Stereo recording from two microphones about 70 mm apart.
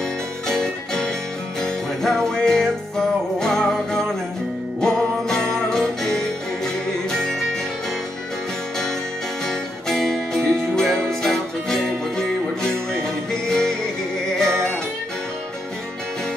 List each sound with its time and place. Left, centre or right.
0.5 s music: centre
9.5 s music: centre